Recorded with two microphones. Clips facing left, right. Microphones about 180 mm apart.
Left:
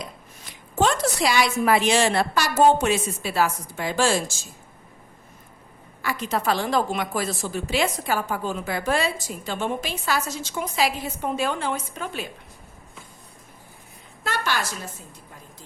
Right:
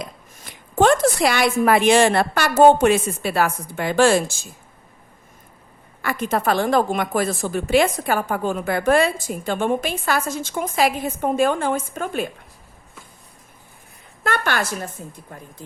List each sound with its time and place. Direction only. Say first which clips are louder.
0.0 s a woman's voice: right 3 dB; 55° right (ahead or behind)
6.0 s a woman's voice: right 4 dB; 55° right (ahead or behind)
14.3 s a woman's voice: right 4 dB; 55° right (ahead or behind)